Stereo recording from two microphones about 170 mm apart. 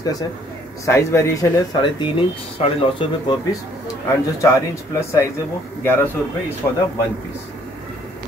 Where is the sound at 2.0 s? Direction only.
30° left (ahead or behind).